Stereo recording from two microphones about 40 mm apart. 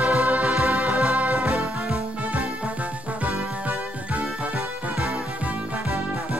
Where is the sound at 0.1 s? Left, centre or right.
Right.